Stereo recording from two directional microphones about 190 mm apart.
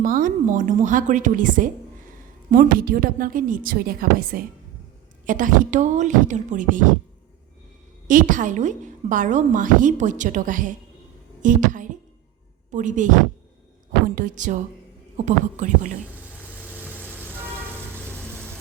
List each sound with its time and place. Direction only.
0.0 s a woman's voice: 45° right (ahead or behind)
8.0 s a woman's voice: 45° right (ahead or behind)
14.2 s a woman's voice: 45° right (ahead or behind)
16.4 s vehicle: 10° left (ahead or behind)